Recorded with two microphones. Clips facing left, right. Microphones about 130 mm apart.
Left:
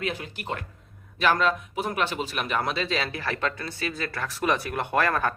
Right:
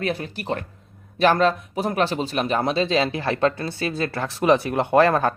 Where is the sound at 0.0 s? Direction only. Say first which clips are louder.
Right 5 dB; 40° right (ahead or behind).